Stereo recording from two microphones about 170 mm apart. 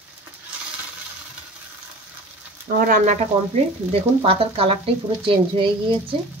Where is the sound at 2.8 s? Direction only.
55° right (ahead or behind).